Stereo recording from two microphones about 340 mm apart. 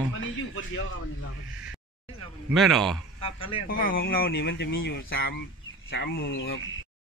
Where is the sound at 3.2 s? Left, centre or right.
Centre.